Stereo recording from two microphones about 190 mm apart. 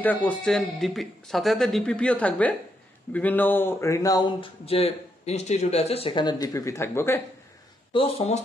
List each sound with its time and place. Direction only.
0.0 s speech: 10° left (ahead or behind)
7.9 s speech: 30° left (ahead or behind)